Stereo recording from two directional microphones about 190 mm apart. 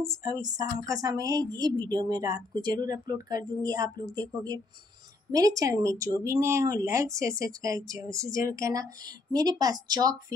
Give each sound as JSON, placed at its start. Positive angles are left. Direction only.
{"t": 0.1, "sound": "speech", "side_deg": -20}